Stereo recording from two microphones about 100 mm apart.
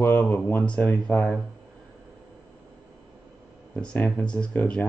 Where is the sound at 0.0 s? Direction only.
20° left (ahead or behind).